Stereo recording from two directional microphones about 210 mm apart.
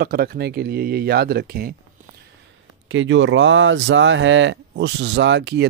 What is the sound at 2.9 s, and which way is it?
Speech, 65° right (ahead or behind).